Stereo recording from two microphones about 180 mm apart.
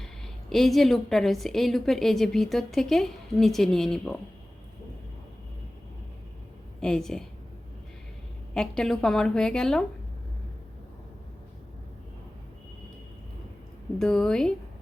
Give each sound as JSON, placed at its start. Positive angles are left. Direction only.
{"t": 0.5, "sound": "a woman's voice", "side_deg": 0}
{"t": 6.7, "sound": "a woman's voice", "side_deg": 5}
{"t": 8.5, "sound": "a woman's voice", "side_deg": 5}
{"t": 14.0, "sound": "a woman's voice", "side_deg": 5}